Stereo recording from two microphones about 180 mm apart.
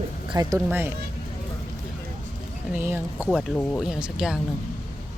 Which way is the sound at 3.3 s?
5° left (ahead or behind).